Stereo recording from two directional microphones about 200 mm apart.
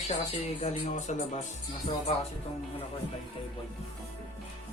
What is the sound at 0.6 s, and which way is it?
Speech, 35° left (ahead or behind).